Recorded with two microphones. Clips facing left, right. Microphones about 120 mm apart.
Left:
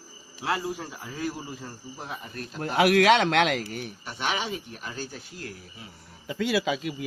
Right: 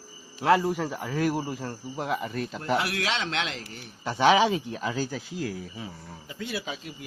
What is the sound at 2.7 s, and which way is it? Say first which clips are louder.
A man's voice: left 10 dB; 65° left (ahead or behind).